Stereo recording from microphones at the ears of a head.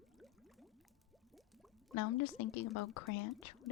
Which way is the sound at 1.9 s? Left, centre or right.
Left.